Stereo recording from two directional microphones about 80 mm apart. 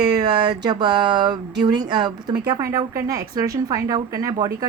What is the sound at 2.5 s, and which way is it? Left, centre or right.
A woman's voice, right.